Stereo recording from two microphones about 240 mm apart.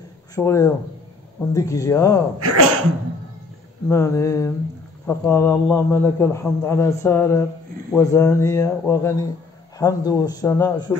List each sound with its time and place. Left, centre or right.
0.4 s a man's voice: centre
2.3 s speech: right
3.9 s a man's voice: centre